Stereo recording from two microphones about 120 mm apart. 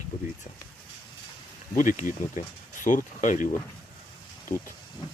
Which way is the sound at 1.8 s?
90° left.